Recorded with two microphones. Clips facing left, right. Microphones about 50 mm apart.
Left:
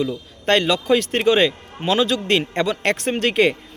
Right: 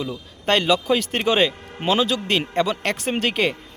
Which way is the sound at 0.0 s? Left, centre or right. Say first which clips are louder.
Left 4 dB; centre.